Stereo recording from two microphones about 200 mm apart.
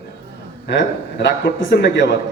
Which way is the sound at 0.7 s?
60° left (ahead or behind).